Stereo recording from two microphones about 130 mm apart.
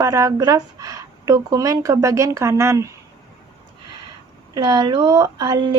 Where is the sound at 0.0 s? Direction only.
25° right (ahead or behind).